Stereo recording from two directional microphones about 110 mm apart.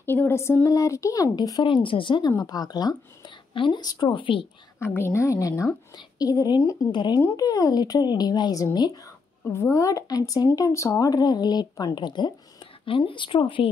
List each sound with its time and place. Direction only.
0.0 s speech: 20° left (ahead or behind); by 2.3 s 45° left (ahead or behind)
2.3 s speech: 35° left (ahead or behind)
4.7 s a woman's voice: 20° left (ahead or behind)
6.9 s speech: 45° left (ahead or behind)
9.4 s speech: 25° left (ahead or behind); by 13.7 s 50° left (ahead or behind)